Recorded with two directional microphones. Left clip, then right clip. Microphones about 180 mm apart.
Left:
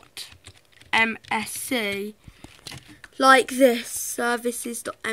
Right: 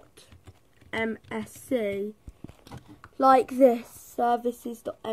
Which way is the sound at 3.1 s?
45° left (ahead or behind).